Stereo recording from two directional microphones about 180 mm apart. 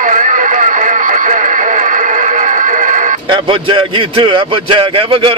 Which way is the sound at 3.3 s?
30° right (ahead or behind).